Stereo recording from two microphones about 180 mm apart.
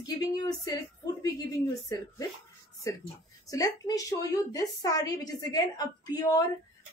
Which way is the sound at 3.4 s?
20° left (ahead or behind).